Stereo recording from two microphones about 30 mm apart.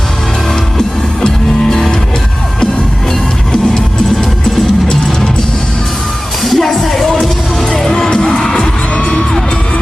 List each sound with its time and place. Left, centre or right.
1.2 s music: centre
6.4 s music: centre
7.7 s music: centre
9.0 s music: left